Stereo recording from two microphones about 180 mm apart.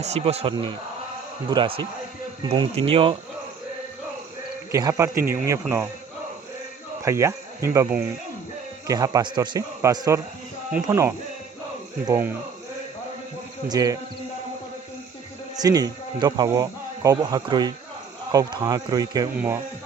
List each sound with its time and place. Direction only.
0.0 s speech: 35° right (ahead or behind)
4.7 s a man's voice: 20° right (ahead or behind)
7.0 s a man's voice: 15° right (ahead or behind)
13.7 s speech: 20° right (ahead or behind)
15.5 s speech: 20° right (ahead or behind)